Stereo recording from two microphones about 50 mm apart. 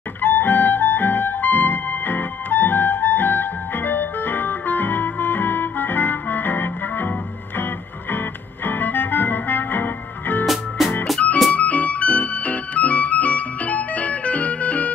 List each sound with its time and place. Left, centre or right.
0.2 s music: left
8.6 s music: left
10.4 s music: centre
11.5 s music: left